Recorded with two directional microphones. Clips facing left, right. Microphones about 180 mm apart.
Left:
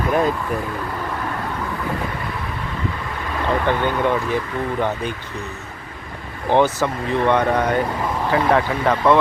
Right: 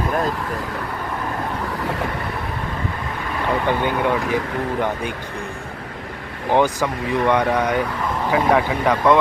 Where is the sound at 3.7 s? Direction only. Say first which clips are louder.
Even; 10° right (ahead or behind).